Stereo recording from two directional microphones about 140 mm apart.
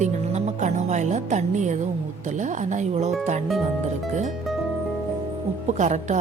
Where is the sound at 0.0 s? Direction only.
55° right (ahead or behind).